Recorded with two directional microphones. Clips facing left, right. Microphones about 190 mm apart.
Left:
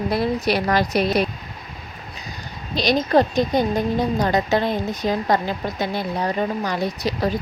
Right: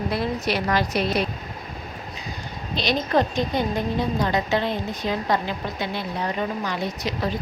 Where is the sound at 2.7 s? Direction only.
35° left (ahead or behind).